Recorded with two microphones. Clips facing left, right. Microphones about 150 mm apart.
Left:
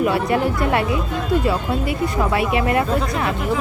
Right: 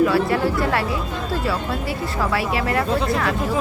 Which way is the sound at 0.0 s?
20° left (ahead or behind).